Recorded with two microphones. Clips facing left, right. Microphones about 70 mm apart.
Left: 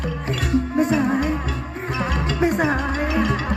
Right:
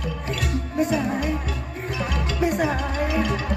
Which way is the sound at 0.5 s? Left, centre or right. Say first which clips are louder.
Left 5 dB; left.